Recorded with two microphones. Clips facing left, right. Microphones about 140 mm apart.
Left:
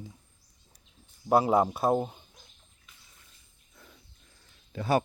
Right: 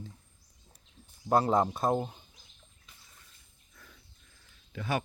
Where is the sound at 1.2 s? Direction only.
10° left (ahead or behind).